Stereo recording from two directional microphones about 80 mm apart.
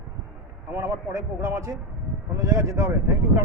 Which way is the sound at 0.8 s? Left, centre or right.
Right.